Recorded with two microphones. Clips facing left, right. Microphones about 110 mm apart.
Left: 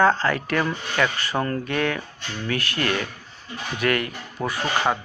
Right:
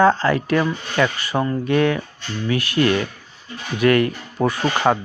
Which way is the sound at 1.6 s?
25° right (ahead or behind).